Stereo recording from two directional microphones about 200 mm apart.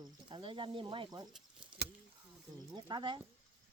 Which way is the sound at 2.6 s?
20° right (ahead or behind).